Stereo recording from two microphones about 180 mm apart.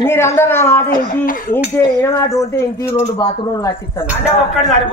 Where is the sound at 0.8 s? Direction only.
50° left (ahead or behind).